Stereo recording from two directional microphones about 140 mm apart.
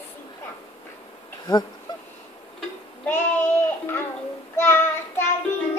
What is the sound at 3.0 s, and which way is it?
Child singing, 15° left (ahead or behind).